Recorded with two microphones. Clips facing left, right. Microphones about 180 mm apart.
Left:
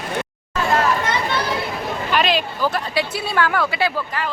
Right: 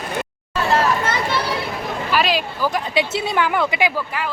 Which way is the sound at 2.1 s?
5° right (ahead or behind).